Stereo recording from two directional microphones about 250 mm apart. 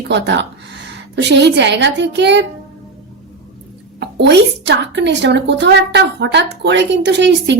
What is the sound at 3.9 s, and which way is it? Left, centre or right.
A woman's voice, right.